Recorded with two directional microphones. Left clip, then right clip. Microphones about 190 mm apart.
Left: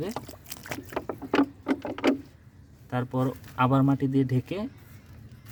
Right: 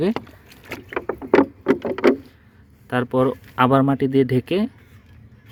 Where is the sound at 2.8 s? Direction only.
25° right (ahead or behind).